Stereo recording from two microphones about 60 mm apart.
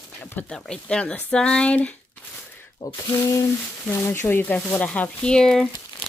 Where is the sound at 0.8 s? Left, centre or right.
Left.